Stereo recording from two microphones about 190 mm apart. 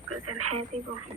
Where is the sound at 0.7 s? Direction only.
35° right (ahead or behind).